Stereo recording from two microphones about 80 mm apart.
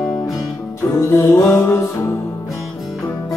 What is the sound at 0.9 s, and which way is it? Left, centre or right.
Music, left.